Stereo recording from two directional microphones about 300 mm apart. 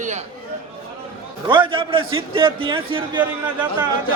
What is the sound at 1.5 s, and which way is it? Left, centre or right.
A man's voice, centre.